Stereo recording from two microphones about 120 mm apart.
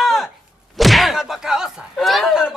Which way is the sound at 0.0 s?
Centre (ahead or behind).